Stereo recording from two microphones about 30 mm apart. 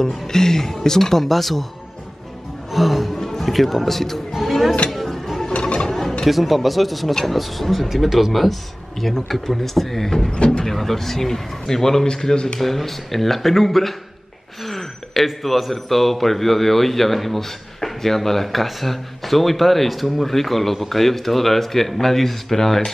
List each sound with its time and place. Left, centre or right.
0.3 s speech: centre
2.7 s music: centre
3.3 s speech: centre
4.3 s a sound: centre
5.5 s mechanisms: left
5.8 s a sound: centre
6.2 s a man's voice: centre
10.3 s speech: left
10.6 s speech: centre; by 12.4 s left
12.5 s a man's voice: centre
14.6 s throat clearing: centre
15.2 s a man's voice: centre